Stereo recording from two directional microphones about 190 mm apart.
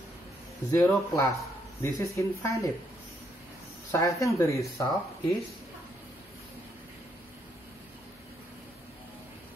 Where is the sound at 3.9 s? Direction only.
15° left (ahead or behind).